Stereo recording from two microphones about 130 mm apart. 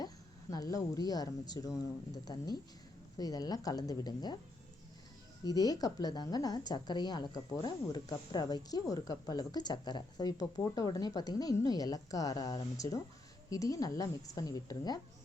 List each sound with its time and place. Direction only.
0.5 s a woman's voice: 30° left (ahead or behind)
5.5 s a woman's voice: 30° left (ahead or behind)